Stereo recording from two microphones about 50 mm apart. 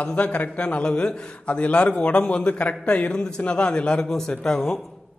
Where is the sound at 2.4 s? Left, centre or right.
Left.